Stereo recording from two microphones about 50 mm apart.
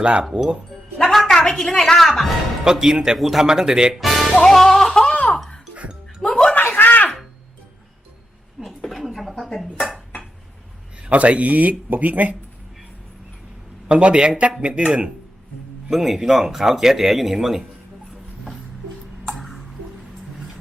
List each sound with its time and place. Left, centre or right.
0.0 s speech: centre
0.3 s speech: centre
1.1 s a woman's voice: centre
2.6 s speech: centre
3.9 s music: centre
6.2 s a sound: centre
6.5 s a sound: left
8.6 s a sound: centre
11.1 s speech: right
13.8 s speech: centre
15.9 s speech: centre
19.3 s a sound: centre